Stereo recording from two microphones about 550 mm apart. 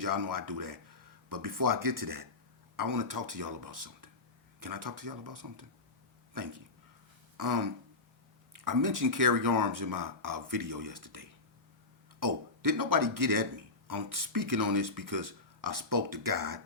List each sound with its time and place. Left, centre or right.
0.0 s a man's voice: right